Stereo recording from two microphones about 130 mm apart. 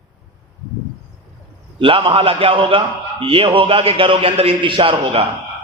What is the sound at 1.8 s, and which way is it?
A man's voice, 45° right (ahead or behind).